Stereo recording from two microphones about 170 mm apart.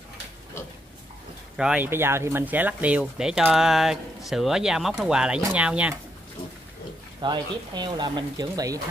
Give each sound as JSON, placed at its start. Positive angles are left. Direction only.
{"t": 1.6, "sound": "speech", "side_deg": -5}
{"t": 7.2, "sound": "speech", "side_deg": -25}